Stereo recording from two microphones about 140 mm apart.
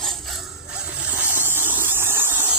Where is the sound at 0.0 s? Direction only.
Centre (ahead or behind).